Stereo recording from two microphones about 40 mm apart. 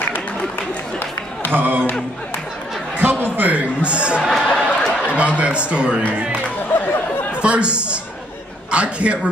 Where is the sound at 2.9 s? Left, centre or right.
Right.